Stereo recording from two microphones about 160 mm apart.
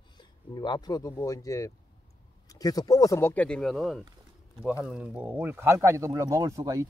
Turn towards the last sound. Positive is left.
turn(degrees=-20)  # may be behind; listen again after turning